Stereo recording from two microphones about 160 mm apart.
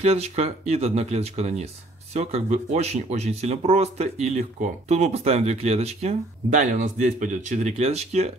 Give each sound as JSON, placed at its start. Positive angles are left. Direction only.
{"t": 0.0, "sound": "speech", "side_deg": -40}